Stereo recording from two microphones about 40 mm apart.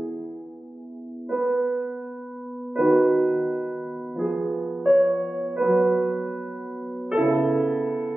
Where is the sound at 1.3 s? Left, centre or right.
Centre.